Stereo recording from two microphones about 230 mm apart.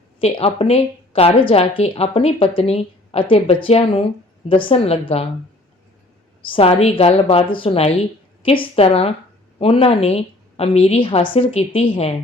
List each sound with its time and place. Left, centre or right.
0.2 s speech: left
6.5 s speech: left